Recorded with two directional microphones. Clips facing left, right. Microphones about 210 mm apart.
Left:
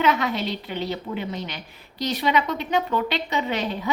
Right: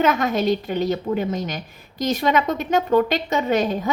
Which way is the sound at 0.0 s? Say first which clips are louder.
Right 4 dB; 45° right (ahead or behind).